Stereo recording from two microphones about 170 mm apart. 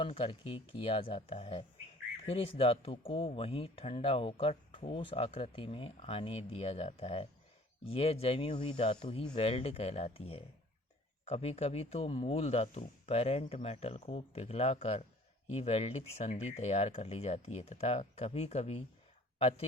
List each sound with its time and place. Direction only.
0.0 s speech: 30° left (ahead or behind)